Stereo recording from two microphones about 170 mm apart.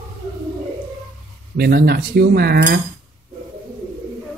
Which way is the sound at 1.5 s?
70° right (ahead or behind).